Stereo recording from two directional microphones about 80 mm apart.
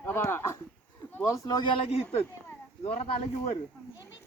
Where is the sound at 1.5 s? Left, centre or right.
Left.